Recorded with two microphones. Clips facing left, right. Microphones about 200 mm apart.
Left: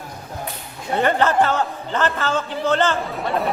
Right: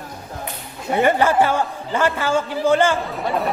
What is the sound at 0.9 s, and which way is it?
A man's voice, 10° right (ahead or behind).